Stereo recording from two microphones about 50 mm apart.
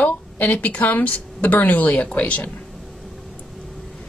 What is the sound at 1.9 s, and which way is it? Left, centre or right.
Speech, left.